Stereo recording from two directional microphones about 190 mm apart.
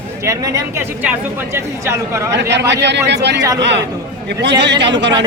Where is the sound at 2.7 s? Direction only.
65° right (ahead or behind).